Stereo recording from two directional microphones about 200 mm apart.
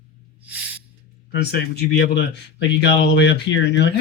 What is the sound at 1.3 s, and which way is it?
Speech, 55° left (ahead or behind).